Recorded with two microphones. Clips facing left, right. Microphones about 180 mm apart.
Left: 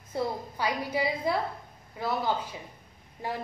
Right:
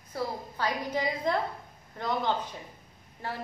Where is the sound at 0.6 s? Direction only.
10° left (ahead or behind).